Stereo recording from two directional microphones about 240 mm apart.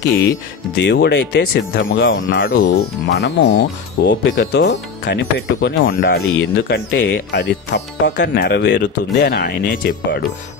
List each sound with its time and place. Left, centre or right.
0.8 s speech: left
1.8 s speech: left